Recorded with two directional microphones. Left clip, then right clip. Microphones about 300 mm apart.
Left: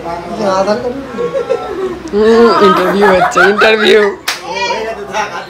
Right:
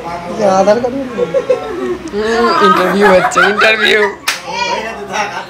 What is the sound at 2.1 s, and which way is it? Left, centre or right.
Speech, centre.